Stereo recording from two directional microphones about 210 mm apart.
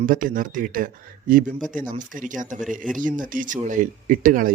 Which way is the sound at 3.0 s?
40° right (ahead or behind).